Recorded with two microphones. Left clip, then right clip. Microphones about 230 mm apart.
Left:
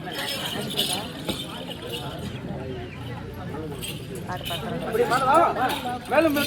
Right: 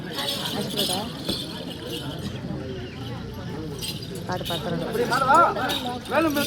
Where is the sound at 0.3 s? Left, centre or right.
Centre.